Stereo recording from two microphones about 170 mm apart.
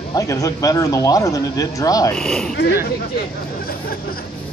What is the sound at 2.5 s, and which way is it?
Speech, 70° left (ahead or behind).